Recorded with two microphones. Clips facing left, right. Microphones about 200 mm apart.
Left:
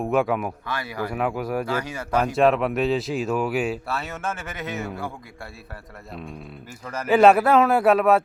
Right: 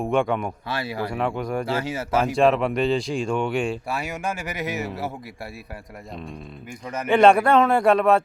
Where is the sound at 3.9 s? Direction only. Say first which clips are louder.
Right 1 dB; 15° right (ahead or behind).